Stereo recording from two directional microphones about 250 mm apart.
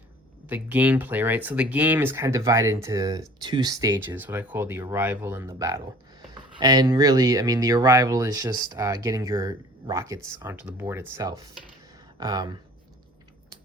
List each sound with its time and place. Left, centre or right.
0.4 s speech: centre